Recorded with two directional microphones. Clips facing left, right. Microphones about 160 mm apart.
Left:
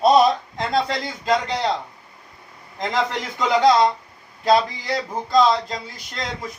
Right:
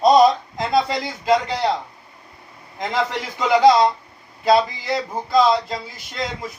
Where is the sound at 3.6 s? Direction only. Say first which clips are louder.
Right 2 dB; 5° right (ahead or behind).